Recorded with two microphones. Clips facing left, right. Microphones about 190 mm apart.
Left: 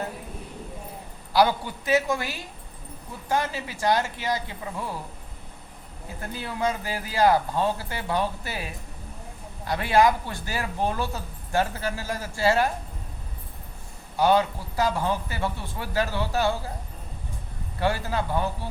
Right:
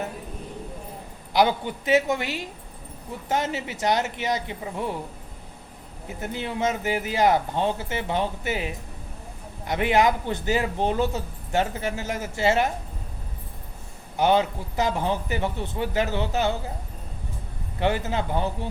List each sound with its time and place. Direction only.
1.3 s speech: 20° right (ahead or behind)
6.1 s speech: 20° right (ahead or behind)
14.2 s speech: 20° right (ahead or behind)
17.7 s speech: 20° right (ahead or behind)